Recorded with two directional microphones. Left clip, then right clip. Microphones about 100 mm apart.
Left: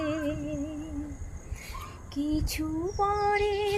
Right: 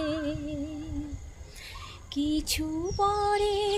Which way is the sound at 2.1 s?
30° left (ahead or behind).